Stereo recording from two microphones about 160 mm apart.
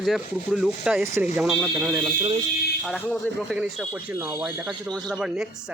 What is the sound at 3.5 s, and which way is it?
Speech, 5° right (ahead or behind).